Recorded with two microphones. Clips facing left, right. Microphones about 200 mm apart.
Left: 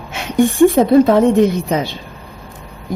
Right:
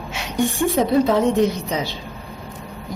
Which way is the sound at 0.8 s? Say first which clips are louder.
Left 3 dB; 55° left (ahead or behind).